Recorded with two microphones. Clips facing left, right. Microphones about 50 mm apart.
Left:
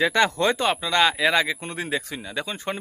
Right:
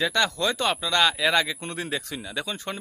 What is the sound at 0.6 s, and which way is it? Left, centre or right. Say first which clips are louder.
Speech: right 1 dB; centre.